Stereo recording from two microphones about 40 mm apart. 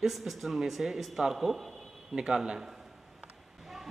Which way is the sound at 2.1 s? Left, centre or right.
Right.